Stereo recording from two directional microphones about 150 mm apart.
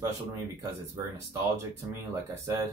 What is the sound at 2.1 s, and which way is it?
Speech, 20° right (ahead or behind).